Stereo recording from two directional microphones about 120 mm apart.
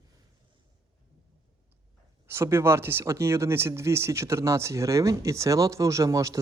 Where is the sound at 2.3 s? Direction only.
20° right (ahead or behind).